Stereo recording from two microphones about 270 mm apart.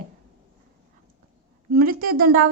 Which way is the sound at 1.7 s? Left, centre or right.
Right.